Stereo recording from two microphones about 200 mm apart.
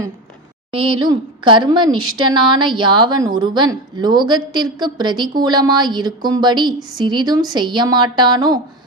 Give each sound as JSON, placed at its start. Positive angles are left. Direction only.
{"t": 0.7, "sound": "a woman's voice", "side_deg": -25}